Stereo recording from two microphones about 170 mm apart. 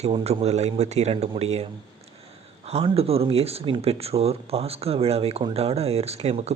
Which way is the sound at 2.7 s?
35° right (ahead or behind).